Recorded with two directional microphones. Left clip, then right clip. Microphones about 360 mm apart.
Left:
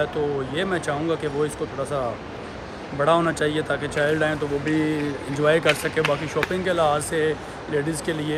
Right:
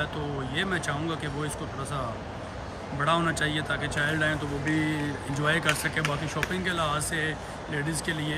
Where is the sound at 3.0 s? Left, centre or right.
Centre.